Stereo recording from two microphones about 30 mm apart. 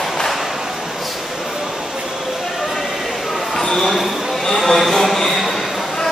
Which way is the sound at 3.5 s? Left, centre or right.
Centre.